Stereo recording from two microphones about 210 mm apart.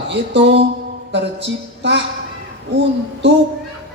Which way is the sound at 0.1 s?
60° right (ahead or behind).